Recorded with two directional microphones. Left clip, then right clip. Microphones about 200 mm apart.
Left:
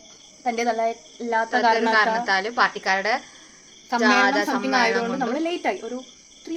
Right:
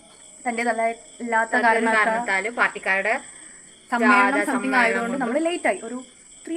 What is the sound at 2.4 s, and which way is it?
Speech, 30° left (ahead or behind).